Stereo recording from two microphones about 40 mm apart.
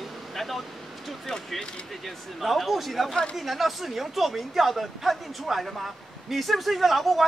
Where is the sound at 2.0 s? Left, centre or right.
Centre.